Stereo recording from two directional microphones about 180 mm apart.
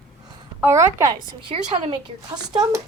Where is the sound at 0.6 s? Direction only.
15° right (ahead or behind).